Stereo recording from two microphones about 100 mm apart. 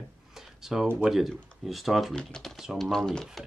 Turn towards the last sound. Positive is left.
turn(degrees=5)  # may be behind; listen again after turning